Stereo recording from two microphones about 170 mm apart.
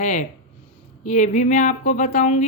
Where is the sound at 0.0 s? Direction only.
45° left (ahead or behind).